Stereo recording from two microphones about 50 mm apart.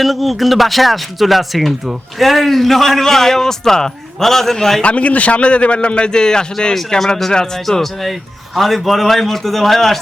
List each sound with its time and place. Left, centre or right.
0.0 s speech: centre
4.8 s a man's voice: left; by 10.0 s centre